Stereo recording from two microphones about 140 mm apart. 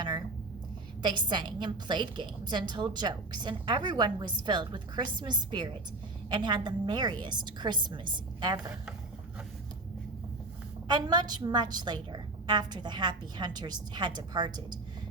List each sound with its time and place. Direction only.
1.0 s a woman's voice: 30° right (ahead or behind)
10.8 s a woman's voice: 30° right (ahead or behind)